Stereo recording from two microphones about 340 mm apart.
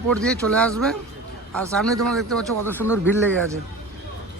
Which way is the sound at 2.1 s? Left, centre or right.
Centre.